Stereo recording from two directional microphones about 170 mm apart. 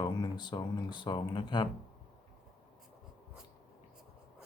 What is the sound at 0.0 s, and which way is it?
Speech, 25° left (ahead or behind).